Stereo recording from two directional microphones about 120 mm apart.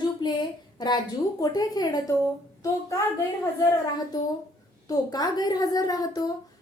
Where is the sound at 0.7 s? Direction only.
35° left (ahead or behind).